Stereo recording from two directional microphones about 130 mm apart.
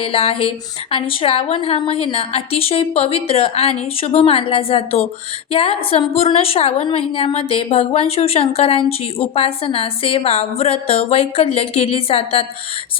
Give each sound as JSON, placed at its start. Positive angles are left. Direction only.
{"t": 0.0, "sound": "a woman's voice", "side_deg": 45}